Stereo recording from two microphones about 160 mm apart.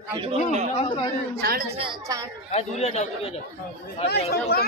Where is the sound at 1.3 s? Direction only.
75° right (ahead or behind).